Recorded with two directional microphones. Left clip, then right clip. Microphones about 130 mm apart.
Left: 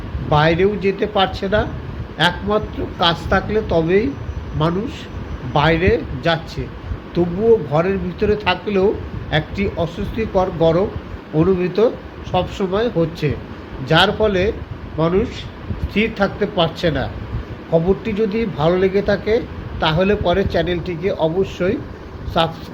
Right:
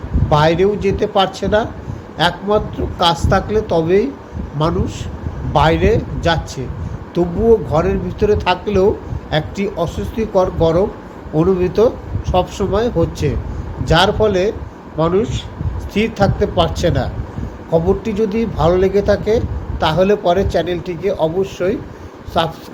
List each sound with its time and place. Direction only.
0.3 s speech: 35° right (ahead or behind)
5.5 s speech: 35° right (ahead or behind)